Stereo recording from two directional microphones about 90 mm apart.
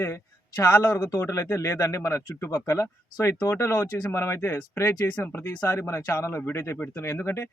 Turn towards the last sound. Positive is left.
turn(degrees=25)  # may be behind; listen again after turning